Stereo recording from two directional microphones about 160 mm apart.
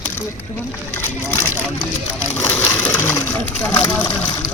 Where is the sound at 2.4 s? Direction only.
10° left (ahead or behind).